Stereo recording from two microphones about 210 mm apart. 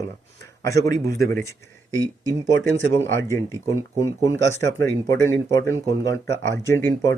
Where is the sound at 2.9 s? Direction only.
10° left (ahead or behind).